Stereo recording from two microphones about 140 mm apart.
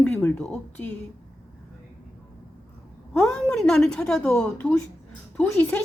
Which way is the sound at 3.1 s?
5° left (ahead or behind).